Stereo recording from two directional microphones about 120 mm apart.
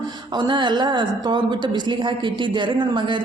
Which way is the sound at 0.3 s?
40° right (ahead or behind).